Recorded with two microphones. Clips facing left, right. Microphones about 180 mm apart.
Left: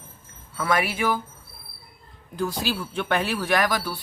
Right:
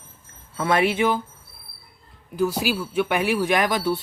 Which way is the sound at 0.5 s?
25° right (ahead or behind).